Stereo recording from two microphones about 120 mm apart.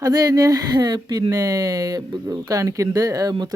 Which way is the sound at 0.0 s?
35° right (ahead or behind).